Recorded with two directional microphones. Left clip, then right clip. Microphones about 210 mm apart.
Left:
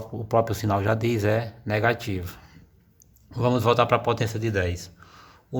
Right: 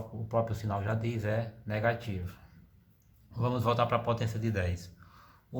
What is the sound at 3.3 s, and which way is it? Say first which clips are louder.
A man's voice: left 9 dB; 40° left (ahead or behind).